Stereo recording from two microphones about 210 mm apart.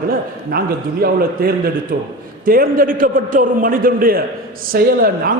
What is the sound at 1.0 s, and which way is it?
A man's voice, 45° right (ahead or behind).